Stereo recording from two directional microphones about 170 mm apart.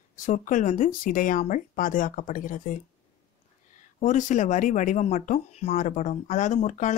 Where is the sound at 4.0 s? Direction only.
45° left (ahead or behind).